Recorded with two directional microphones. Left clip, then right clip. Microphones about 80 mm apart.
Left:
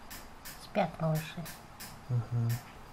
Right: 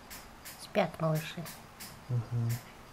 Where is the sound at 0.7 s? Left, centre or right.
Right.